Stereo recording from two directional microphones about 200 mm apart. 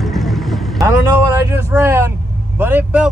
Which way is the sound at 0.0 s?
Centre (ahead or behind).